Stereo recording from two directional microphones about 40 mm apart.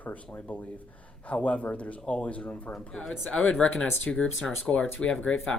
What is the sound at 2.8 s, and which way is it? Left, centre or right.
Speech, left.